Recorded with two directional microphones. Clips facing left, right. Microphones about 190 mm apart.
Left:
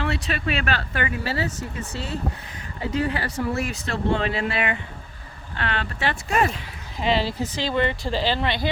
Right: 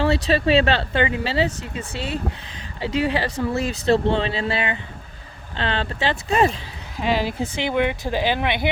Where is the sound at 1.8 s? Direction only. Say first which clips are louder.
Right 4 dB; 90° right.